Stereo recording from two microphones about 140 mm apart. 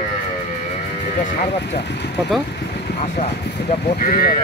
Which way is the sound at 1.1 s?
65° left (ahead or behind).